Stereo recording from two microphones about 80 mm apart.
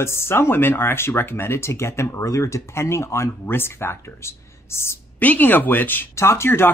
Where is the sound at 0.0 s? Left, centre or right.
Left.